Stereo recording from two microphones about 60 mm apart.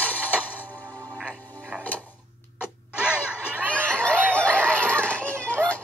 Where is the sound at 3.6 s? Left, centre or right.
Centre.